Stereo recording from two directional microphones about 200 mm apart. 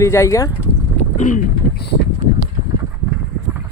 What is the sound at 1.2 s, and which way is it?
Speech, 40° left (ahead or behind).